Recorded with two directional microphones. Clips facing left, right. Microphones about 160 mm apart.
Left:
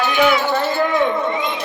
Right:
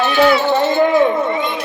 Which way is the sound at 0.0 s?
15° left (ahead or behind).